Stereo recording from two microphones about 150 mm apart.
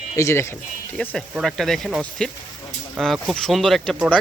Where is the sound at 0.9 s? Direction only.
10° left (ahead or behind).